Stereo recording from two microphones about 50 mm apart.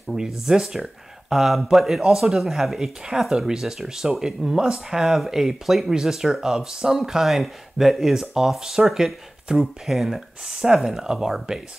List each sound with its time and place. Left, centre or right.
0.5 s speech: centre
9.8 s speech: centre